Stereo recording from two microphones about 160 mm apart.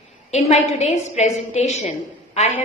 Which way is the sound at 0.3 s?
40° left (ahead or behind).